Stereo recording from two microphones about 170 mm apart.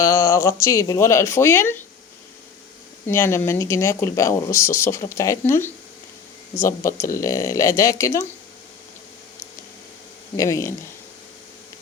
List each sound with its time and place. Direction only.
0.0 s speech: 20° left (ahead or behind)
3.1 s speech: 15° left (ahead or behind)
10.3 s speech: 20° left (ahead or behind)